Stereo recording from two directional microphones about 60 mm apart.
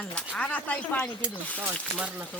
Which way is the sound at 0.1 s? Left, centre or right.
Centre.